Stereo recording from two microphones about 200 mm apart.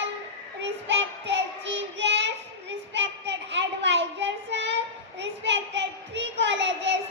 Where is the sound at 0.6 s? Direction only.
65° right (ahead or behind).